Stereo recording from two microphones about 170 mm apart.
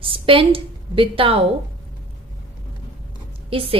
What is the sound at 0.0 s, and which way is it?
A woman's voice, 30° right (ahead or behind).